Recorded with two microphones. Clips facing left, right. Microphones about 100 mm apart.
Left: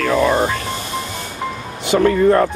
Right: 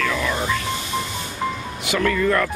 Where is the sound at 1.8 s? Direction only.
30° left (ahead or behind).